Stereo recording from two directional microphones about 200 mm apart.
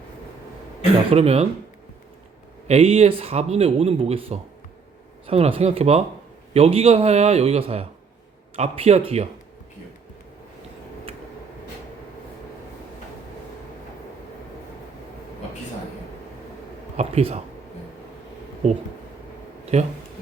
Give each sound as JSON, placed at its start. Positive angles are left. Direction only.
{"t": 1.1, "sound": "a man's voice", "side_deg": -30}
{"t": 2.6, "sound": "a man's voice", "side_deg": -30}
{"t": 17.0, "sound": "speech", "side_deg": -30}
{"t": 19.7, "sound": "a man's voice", "side_deg": -35}